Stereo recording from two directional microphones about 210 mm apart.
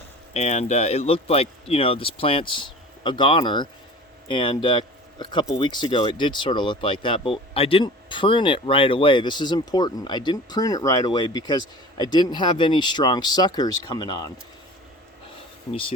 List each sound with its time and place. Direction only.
0.3 s speech: 35° left (ahead or behind)